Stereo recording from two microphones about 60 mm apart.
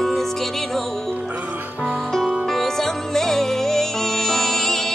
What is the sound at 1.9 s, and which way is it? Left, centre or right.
Music, centre.